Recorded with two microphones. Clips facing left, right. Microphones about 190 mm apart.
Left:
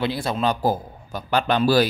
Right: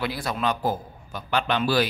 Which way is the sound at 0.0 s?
25° left (ahead or behind).